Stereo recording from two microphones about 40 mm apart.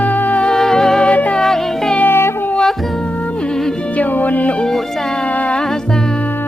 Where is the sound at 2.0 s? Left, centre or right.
Left.